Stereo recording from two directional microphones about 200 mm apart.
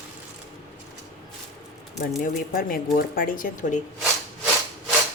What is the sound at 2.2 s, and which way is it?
Speech, 45° left (ahead or behind).